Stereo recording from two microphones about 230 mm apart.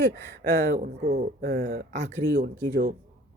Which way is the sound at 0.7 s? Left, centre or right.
Right.